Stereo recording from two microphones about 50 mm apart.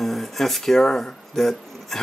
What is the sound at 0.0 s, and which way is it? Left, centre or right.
Speech, centre.